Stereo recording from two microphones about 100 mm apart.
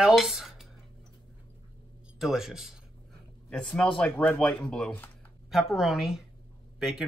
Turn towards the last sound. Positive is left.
turn(degrees=-5)  # may be behind; listen again after turning